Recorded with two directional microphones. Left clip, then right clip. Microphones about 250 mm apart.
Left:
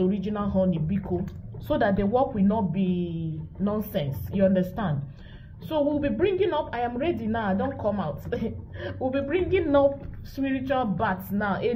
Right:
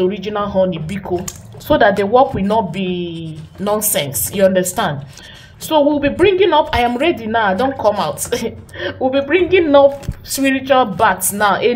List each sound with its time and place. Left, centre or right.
0.0 s a woman's voice: right